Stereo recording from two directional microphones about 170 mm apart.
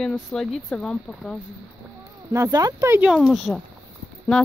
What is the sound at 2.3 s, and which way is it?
Speech, 20° right (ahead or behind).